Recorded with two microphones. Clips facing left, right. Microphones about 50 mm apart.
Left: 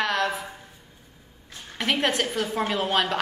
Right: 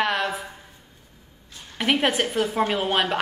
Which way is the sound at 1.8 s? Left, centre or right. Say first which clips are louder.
Right 2 dB; centre.